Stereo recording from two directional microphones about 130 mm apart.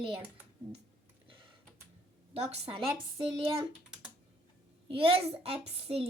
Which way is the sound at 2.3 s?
50° right (ahead or behind).